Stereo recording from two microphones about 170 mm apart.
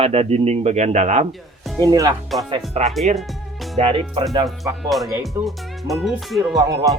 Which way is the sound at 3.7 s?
30° right (ahead or behind).